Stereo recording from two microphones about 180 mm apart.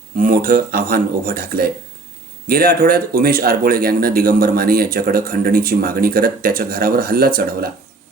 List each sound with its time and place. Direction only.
0.2 s speech: 50° right (ahead or behind)